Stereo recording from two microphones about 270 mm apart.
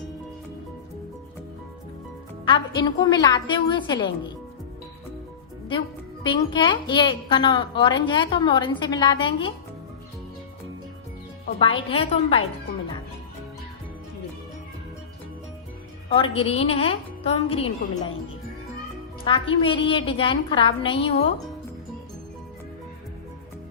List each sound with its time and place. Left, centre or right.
2.5 s a woman's voice: centre
6.2 s a woman's voice: centre
11.6 s a woman's voice: centre
16.1 s a woman's voice: centre
19.2 s a woman's voice: centre